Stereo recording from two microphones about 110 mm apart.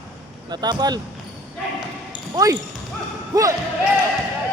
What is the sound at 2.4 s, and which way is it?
Speech, 30° right (ahead or behind).